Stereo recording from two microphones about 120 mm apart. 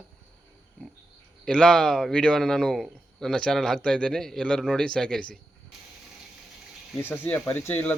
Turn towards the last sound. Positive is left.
turn(degrees=15)  # may be behind; listen again after turning